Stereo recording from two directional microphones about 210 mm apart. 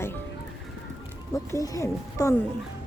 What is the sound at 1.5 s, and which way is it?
Speech, 15° left (ahead or behind).